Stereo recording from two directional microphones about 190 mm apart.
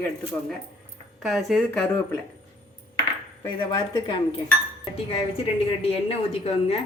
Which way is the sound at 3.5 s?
25° left (ahead or behind).